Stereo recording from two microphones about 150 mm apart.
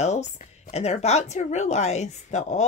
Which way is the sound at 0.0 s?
50° left (ahead or behind).